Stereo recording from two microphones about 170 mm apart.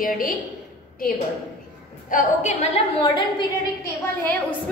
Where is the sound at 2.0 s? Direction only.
45° left (ahead or behind).